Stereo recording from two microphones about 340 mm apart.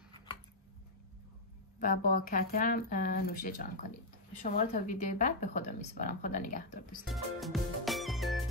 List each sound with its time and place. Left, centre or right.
1.8 s speech: left
7.1 s music: centre